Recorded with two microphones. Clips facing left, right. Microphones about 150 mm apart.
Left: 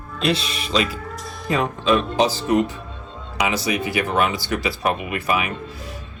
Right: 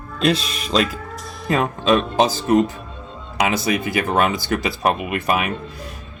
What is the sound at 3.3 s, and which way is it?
Speech, 45° right (ahead or behind).